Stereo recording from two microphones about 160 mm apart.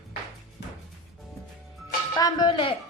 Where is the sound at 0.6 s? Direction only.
90° left.